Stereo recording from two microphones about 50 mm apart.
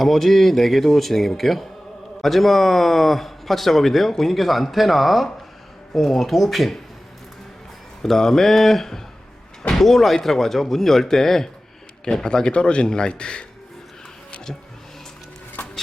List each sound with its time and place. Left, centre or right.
0.0 s speech: centre
8.0 s speech: centre